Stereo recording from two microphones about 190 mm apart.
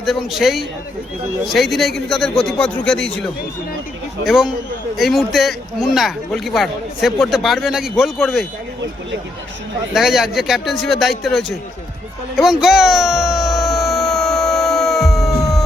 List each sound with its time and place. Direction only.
0.0 s speech: centre (ahead or behind)
4.3 s speech: centre (ahead or behind)
9.9 s speech: centre (ahead or behind)
12.4 s a sound: centre (ahead or behind)